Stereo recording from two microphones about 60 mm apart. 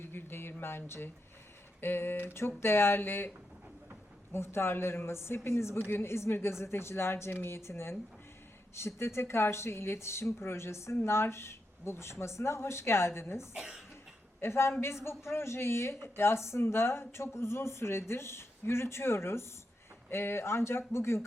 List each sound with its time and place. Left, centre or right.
0.0 s a sound: left
1.8 s speech: left
13.5 s speech: centre
14.4 s speech: left